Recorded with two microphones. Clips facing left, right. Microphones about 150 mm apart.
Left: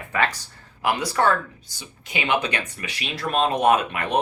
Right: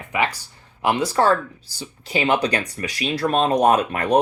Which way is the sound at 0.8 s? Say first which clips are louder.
Right 3 dB; 25° right (ahead or behind).